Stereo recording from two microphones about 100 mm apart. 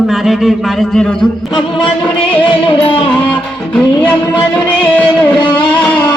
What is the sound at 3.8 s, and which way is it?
Music, 15° left (ahead or behind).